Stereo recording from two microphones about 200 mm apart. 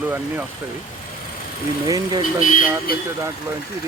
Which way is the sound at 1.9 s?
20° right (ahead or behind).